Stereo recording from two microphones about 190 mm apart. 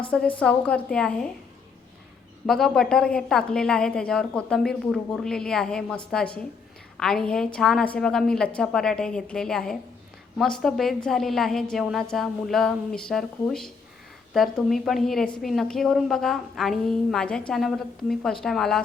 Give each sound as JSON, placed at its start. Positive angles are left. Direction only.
{"t": 0.1, "sound": "a woman's voice", "side_deg": 5}
{"t": 2.5, "sound": "a woman's voice", "side_deg": 0}